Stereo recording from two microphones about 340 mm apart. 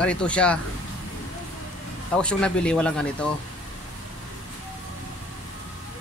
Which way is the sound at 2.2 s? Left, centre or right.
Centre.